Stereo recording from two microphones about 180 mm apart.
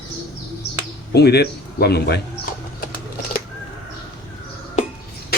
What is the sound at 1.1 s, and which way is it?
A man's voice, 65° left (ahead or behind).